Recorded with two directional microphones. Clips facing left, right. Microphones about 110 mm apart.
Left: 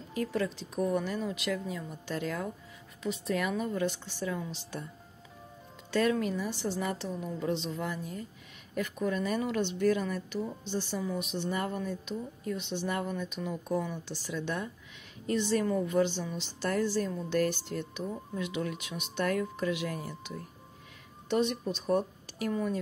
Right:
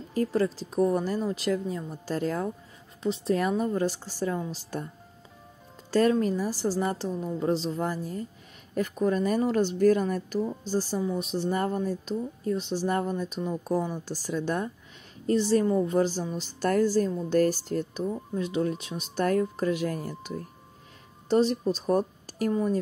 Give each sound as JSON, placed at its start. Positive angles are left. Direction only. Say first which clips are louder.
{"t": 0.1, "sound": "a woman's voice", "louder": "right 6 dB", "side_deg": -35}
{"t": 5.9, "sound": "a woman's voice", "louder": "right 5 dB", "side_deg": -35}
{"t": 11.0, "sound": "a woman's voice", "louder": "right 5 dB", "side_deg": -30}
{"t": 21.3, "sound": "speech", "louder": "right 6 dB", "side_deg": -35}